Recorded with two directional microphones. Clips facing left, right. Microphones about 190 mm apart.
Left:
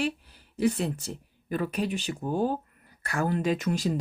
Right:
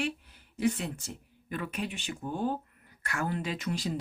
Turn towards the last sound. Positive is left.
turn(degrees=45)  # may be behind; listen again after turning